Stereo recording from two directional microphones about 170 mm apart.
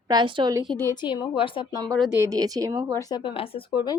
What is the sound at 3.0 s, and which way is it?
Speech, 25° left (ahead or behind).